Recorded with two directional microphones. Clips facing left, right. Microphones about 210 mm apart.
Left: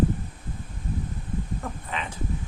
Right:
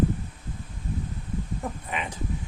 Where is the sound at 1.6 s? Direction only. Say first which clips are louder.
Right 1 dB; 15° right (ahead or behind).